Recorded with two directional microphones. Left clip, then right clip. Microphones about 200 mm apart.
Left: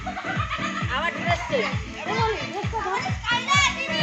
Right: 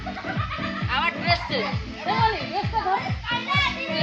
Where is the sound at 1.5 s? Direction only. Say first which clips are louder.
Left 2 dB; 45° right (ahead or behind).